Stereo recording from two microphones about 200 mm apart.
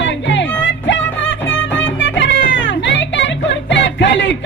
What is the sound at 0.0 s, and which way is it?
Music, 65° left (ahead or behind).